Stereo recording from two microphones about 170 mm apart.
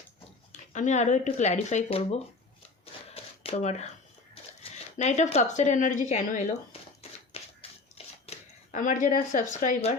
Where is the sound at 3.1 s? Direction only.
35° left (ahead or behind).